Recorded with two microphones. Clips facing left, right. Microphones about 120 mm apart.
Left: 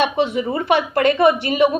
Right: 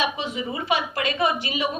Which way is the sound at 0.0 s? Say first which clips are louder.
Left 8 dB; 60° left (ahead or behind).